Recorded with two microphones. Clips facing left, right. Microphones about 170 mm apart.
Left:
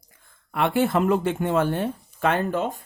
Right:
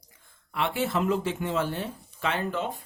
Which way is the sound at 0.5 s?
55° left (ahead or behind).